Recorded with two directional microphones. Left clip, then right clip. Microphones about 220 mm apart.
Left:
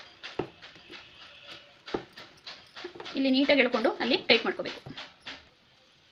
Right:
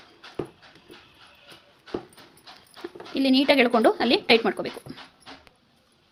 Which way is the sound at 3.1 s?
50° right (ahead or behind).